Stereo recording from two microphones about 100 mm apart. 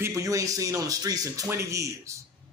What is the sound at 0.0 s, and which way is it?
Speech, 35° right (ahead or behind).